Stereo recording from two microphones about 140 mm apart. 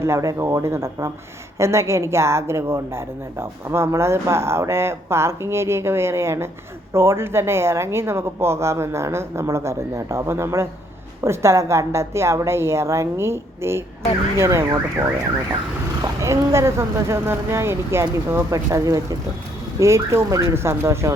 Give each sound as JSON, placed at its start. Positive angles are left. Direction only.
{"t": 0.0, "sound": "a woman's voice", "side_deg": -20}